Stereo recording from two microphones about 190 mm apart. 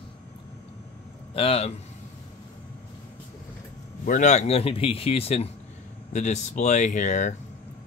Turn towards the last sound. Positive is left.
turn(degrees=40)  # may be behind; listen again after turning